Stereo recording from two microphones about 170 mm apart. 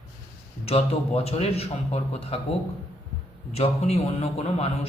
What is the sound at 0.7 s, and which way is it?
A man's voice, 35° left (ahead or behind).